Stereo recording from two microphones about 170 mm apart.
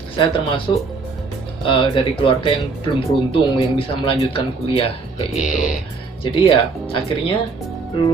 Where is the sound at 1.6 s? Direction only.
30° left (ahead or behind).